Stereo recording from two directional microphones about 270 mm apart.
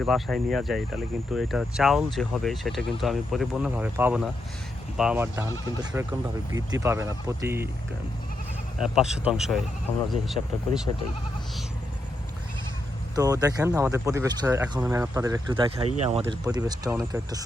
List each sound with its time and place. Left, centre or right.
0.0 s speech: centre
8.8 s speech: centre
13.1 s speech: centre